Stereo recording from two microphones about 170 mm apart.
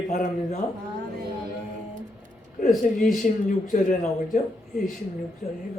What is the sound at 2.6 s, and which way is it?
A man's voice, 55° left (ahead or behind).